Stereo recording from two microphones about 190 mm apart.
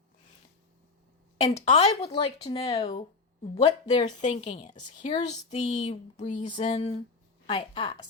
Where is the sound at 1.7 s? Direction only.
30° left (ahead or behind).